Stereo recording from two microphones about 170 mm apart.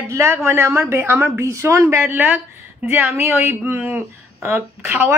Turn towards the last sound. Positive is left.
turn(degrees=-10)  # may be behind; listen again after turning